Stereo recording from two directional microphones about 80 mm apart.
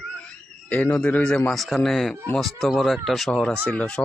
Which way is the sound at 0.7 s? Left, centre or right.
Left.